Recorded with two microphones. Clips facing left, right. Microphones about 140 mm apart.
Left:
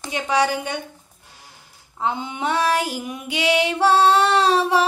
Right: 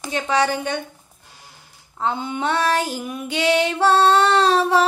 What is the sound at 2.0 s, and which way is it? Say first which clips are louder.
Female singing: right 1 dB; 15° left (ahead or behind).